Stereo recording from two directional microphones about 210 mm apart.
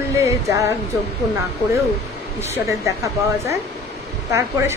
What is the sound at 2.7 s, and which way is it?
Speech, 15° right (ahead or behind).